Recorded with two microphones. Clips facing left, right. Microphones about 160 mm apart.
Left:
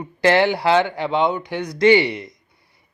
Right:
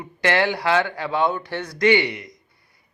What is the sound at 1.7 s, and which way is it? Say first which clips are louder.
Speech: left 4 dB; 30° left (ahead or behind).